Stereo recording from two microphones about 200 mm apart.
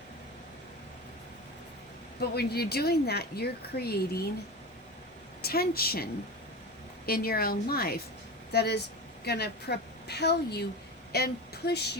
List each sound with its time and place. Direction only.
2.3 s a woman's voice: 50° left (ahead or behind)
5.4 s a woman's voice: 50° left (ahead or behind)